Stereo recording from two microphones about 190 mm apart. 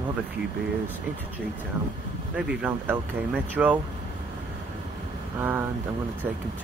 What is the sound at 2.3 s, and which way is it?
Speech, 5° right (ahead or behind).